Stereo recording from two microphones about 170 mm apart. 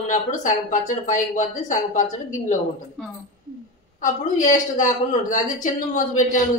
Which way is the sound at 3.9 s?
50° left (ahead or behind).